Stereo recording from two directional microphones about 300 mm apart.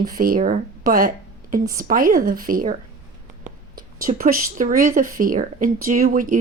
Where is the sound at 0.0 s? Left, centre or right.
Right.